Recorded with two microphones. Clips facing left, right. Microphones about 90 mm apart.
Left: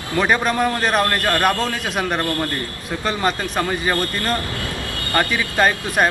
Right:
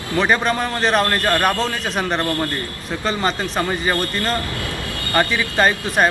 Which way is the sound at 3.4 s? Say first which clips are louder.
Even; 5° right (ahead or behind).